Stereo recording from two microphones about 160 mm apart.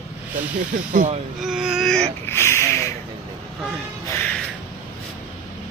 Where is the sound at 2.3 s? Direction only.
15° left (ahead or behind).